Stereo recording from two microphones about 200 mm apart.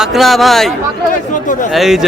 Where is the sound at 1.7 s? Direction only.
Centre (ahead or behind).